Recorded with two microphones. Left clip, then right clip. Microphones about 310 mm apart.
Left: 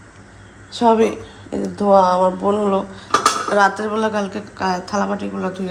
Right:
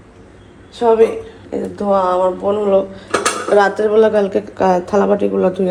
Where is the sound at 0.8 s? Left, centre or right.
Left.